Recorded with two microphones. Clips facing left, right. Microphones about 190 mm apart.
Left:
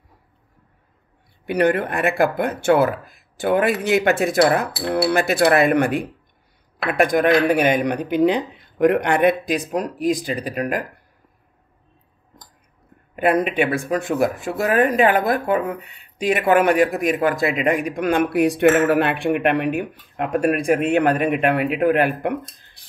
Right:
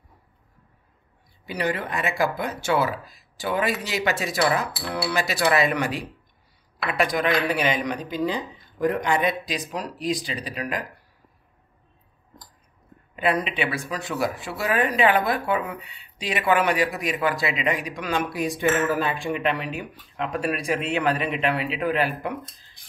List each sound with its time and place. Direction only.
1.4 s speech: 60° left (ahead or behind)
13.1 s speech: 50° left (ahead or behind)